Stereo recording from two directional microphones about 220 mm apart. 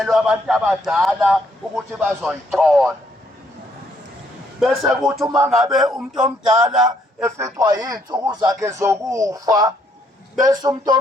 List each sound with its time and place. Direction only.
0.0 s a man's voice: centre (ahead or behind)
4.6 s a man's voice: centre (ahead or behind); by 10.9 s 15° right (ahead or behind)